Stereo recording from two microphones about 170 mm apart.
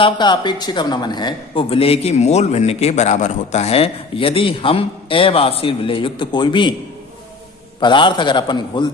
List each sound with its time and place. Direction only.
0.0 s a man's voice: 25° left (ahead or behind)
7.8 s a man's voice: 30° left (ahead or behind)